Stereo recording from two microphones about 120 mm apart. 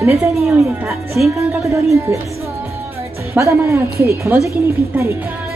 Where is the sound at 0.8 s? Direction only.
Centre (ahead or behind).